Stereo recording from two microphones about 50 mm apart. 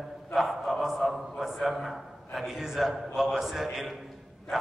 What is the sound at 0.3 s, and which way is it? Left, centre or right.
A man's voice, centre.